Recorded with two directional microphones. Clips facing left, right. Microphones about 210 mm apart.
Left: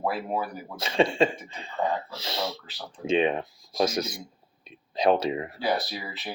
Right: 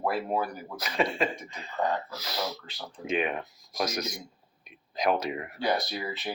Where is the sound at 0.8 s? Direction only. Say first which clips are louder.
Left 6 dB; 25° left (ahead or behind).